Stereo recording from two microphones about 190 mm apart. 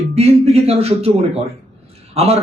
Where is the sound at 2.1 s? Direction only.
30° right (ahead or behind).